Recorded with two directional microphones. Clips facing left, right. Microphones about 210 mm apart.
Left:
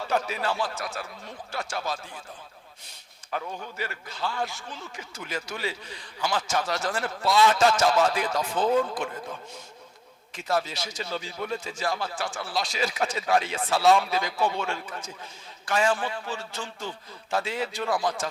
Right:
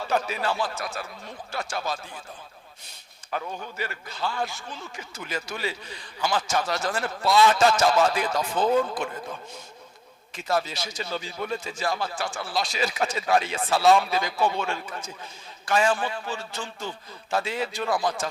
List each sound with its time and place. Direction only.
0.0 s a man's voice: 15° right (ahead or behind)
3.6 s a man's voice: 15° right (ahead or behind)
8.7 s a man's voice: 30° right (ahead or behind); by 18.3 s 10° right (ahead or behind)